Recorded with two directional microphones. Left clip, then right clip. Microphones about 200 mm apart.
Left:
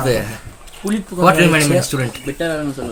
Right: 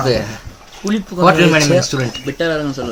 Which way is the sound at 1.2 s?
15° left (ahead or behind).